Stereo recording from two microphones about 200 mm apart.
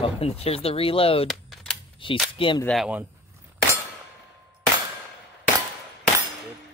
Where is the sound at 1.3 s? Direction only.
Centre (ahead or behind).